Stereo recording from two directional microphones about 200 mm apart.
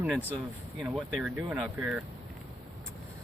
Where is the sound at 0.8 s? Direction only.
Centre (ahead or behind).